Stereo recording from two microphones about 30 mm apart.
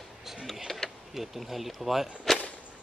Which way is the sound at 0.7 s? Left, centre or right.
Centre.